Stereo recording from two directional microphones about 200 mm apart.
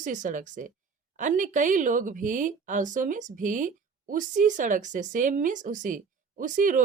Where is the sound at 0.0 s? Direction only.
40° right (ahead or behind).